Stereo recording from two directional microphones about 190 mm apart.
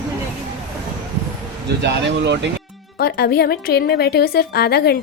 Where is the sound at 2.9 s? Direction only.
55° left (ahead or behind).